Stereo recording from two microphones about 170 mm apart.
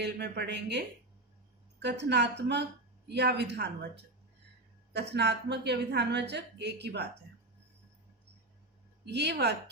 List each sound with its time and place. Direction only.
0.0 s a woman's voice: 75° right (ahead or behind)
1.8 s a woman's voice: 85° right
4.9 s a woman's voice: 80° right
9.0 s speech: 75° right (ahead or behind)